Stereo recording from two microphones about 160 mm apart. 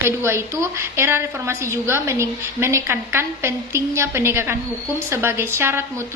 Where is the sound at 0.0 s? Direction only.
15° right (ahead or behind).